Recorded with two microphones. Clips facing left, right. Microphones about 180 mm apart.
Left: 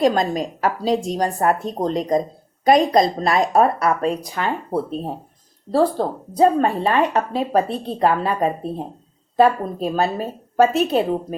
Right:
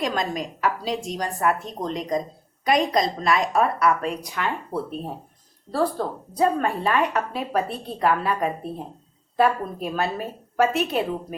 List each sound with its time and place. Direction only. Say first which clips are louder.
0.0 s a woman's voice: left 8 dB; 35° left (ahead or behind)